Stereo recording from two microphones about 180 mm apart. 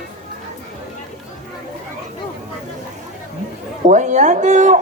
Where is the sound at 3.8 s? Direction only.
40° right (ahead or behind).